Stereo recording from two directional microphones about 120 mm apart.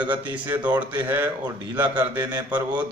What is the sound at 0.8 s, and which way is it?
Speech, 15° right (ahead or behind).